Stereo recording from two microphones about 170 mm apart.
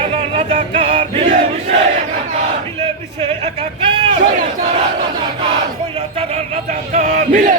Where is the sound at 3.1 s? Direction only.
35° right (ahead or behind).